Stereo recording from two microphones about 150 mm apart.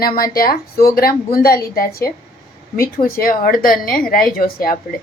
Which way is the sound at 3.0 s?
70° left (ahead or behind).